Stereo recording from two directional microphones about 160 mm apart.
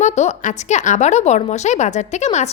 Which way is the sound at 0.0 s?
45° left (ahead or behind).